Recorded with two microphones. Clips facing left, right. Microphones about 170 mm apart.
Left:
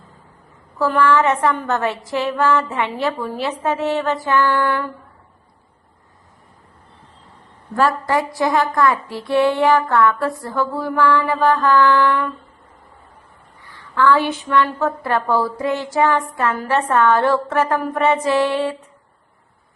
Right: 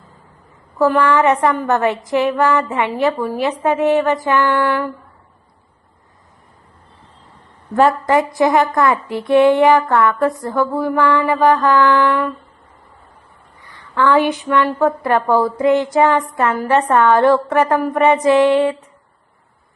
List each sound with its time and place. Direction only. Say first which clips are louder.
0.8 s a woman's voice: right 2 dB; 15° right (ahead or behind)
7.8 s a woman's voice: right 4 dB; 20° right (ahead or behind)
13.7 s a woman's voice: even; 15° right (ahead or behind)